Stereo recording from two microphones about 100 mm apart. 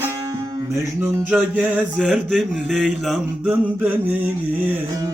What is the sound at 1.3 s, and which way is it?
Mantra, 10° right (ahead or behind).